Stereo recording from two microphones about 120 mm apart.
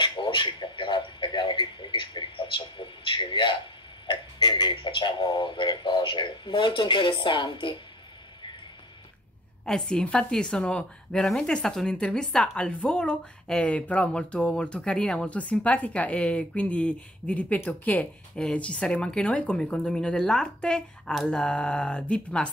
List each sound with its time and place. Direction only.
0.0 s a sound: 45° left (ahead or behind)
4.1 s speech: 40° left (ahead or behind)
9.7 s a woman's voice: 5° left (ahead or behind)